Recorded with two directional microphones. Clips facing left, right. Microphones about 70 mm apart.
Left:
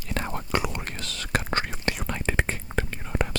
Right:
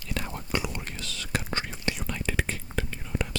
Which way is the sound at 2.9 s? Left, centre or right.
Left.